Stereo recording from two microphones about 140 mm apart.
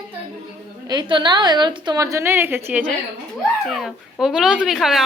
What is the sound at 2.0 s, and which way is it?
Speech, 20° right (ahead or behind).